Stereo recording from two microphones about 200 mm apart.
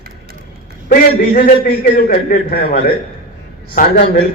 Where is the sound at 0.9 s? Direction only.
50° left (ahead or behind).